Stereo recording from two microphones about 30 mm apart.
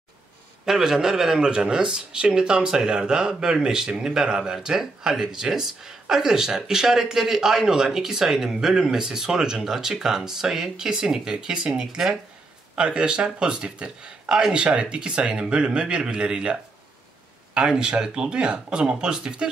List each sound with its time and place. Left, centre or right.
0.7 s speech: centre
1.4 s speech: right
17.6 s speech: right